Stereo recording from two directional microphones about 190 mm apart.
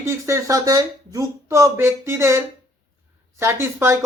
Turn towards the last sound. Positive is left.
turn(degrees=-15)  # may be behind; listen again after turning